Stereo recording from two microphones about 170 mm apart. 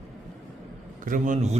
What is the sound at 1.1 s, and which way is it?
Speech, 45° right (ahead or behind).